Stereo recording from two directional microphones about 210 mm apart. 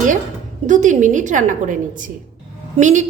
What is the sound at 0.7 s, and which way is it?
A woman's voice, 35° right (ahead or behind).